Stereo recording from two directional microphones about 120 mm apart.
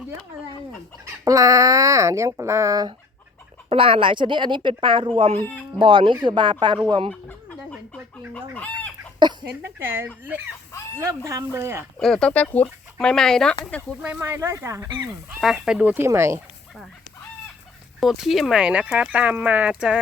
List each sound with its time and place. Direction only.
1.0 s speech: 30° right (ahead or behind)
3.7 s speech: 50° right (ahead or behind)
5.4 s speech: 15° left (ahead or behind)
5.8 s a woman's voice: 45° right (ahead or behind)
7.1 s a sound: 15° left (ahead or behind)
8.3 s chicken: 10° left (ahead or behind)
9.1 s speech: 40° right (ahead or behind)
9.7 s speech: 20° right (ahead or behind)
11.9 s speech: 5° left (ahead or behind)
14.2 s a woman's voice: 25° right (ahead or behind)
15.4 s speech: centre (ahead or behind)
16.0 s speech: 20° right (ahead or behind)
18.0 s speech: centre (ahead or behind)